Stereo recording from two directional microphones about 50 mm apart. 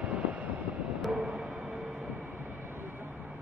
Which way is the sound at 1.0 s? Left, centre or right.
Centre.